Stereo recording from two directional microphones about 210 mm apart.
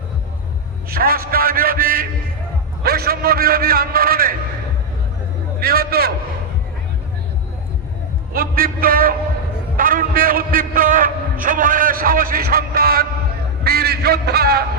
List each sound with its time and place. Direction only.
0.9 s a man's voice: 45° right (ahead or behind)
5.5 s a man's voice: 45° right (ahead or behind)
8.3 s a man's voice: 45° right (ahead or behind)